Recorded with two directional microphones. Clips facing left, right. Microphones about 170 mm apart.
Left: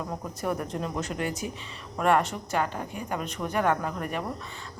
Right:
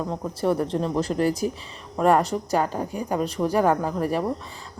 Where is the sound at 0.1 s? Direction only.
30° right (ahead or behind).